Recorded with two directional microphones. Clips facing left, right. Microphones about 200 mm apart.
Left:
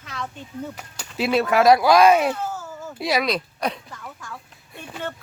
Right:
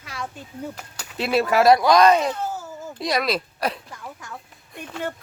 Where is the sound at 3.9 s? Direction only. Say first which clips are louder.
Right 1 dB; 20° right (ahead or behind).